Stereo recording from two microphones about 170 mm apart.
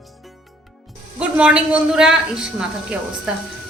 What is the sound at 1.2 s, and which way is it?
A man's voice, 5° right (ahead or behind).